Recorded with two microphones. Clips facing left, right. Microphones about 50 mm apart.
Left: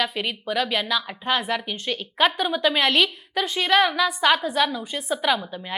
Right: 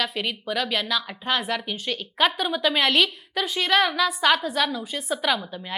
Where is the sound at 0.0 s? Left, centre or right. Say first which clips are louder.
Left 1 dB; centre.